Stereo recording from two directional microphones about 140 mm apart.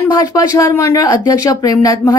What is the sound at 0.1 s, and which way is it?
A woman's voice, 25° left (ahead or behind).